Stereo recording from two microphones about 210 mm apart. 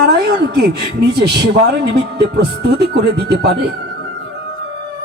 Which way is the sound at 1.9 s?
50° right (ahead or behind).